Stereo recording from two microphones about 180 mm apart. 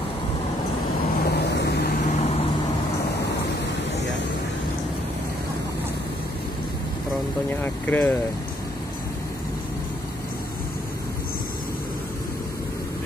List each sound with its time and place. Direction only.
1.2 s vehicle: 65° left (ahead or behind)
2.0 s vehicle: 40° left (ahead or behind)
7.6 s speech: 10° left (ahead or behind)